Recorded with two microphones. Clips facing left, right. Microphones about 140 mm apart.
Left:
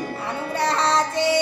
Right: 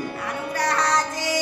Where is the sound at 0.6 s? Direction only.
25° left (ahead or behind).